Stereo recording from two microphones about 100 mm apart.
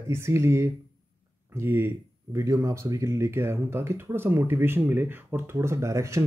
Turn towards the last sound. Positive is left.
turn(degrees=-30)  # may be behind; listen again after turning